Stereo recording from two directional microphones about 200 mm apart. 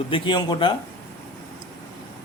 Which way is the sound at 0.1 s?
25° left (ahead or behind).